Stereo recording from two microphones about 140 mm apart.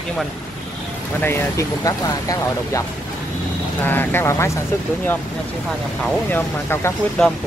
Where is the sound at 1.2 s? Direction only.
20° left (ahead or behind).